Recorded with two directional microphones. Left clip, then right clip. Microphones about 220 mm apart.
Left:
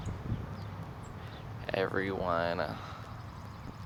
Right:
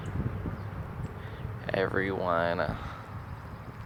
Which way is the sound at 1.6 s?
Centre (ahead or behind).